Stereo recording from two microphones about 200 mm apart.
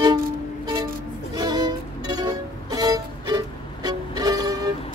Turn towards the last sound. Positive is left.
turn(degrees=-20)  # may be behind; listen again after turning